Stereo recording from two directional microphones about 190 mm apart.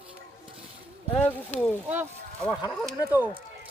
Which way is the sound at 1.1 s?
10° left (ahead or behind).